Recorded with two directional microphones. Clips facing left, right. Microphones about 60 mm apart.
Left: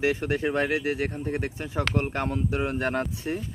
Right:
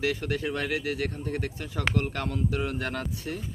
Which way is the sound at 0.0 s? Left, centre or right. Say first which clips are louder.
Left 4 dB; left.